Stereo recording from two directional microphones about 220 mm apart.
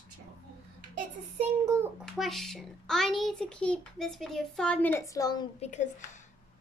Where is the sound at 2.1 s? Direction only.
Centre (ahead or behind); by 5.5 s 15° left (ahead or behind).